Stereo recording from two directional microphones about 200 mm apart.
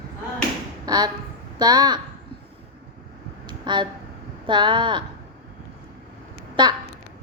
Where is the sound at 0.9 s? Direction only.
20° right (ahead or behind).